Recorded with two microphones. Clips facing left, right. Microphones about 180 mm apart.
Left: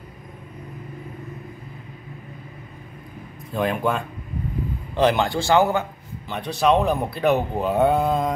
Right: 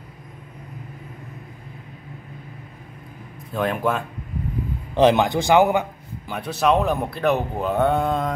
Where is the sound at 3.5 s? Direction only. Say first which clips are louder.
Even; centre (ahead or behind).